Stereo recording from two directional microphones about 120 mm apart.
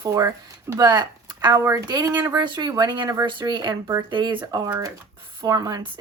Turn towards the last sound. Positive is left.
turn(degrees=-35)  # may be behind; listen again after turning